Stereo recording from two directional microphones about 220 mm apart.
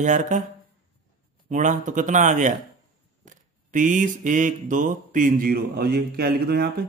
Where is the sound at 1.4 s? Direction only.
35° right (ahead or behind).